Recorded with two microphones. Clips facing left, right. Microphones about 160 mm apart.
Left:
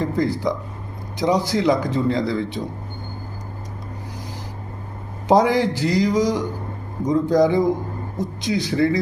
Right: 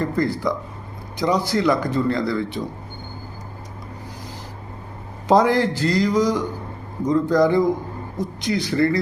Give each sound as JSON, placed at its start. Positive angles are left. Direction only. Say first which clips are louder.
{"t": 0.0, "sound": "a man's voice", "louder": "left 1 dB", "side_deg": 20}
{"t": 5.3, "sound": "a man's voice", "louder": "even", "side_deg": 15}